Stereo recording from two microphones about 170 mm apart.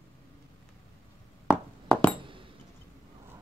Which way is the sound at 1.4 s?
Centre (ahead or behind).